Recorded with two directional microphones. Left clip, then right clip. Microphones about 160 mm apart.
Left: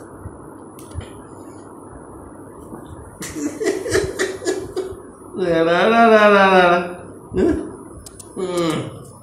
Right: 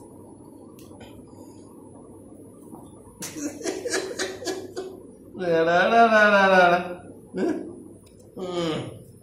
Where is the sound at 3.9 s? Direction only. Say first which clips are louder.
Left 8 dB; 15° right (ahead or behind).